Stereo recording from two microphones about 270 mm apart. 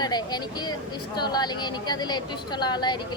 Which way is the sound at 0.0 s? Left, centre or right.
Centre.